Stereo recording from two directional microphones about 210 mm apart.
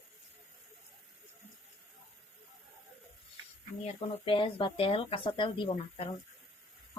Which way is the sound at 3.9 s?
25° left (ahead or behind).